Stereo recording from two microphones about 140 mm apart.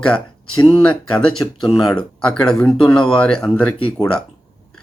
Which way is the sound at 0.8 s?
5° left (ahead or behind).